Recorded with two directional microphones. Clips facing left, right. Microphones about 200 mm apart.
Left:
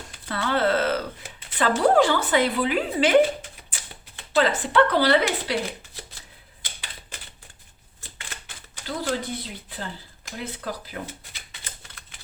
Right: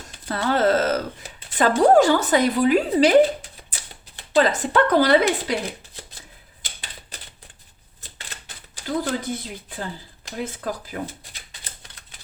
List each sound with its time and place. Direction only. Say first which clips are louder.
0.3 s a sound: right 3 dB; 40° right (ahead or behind)
1.9 s speech: right 3 dB; 40° right (ahead or behind)
4.4 s speech: right 1 dB; 40° right (ahead or behind)
8.7 s speech: right 3 dB; 40° right (ahead or behind)